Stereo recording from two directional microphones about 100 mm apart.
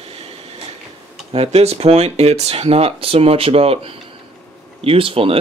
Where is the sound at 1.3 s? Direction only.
85° right.